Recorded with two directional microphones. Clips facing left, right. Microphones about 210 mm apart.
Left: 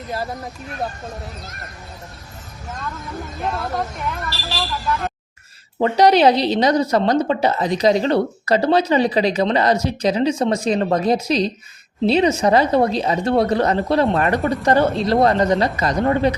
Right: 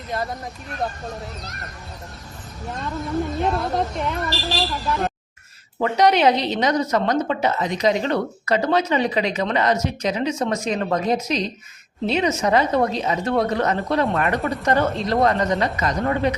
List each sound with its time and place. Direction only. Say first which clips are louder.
0.1 s speech: even; centre (ahead or behind)
3.0 s speech: right 8 dB; centre (ahead or behind)
5.8 s a woman's voice: left 3 dB; 35° left (ahead or behind)